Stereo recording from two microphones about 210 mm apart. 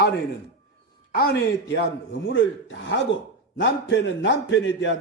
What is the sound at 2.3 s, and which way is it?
A man's voice, 60° left (ahead or behind).